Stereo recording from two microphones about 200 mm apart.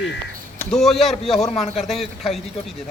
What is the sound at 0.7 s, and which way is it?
Speech, centre (ahead or behind).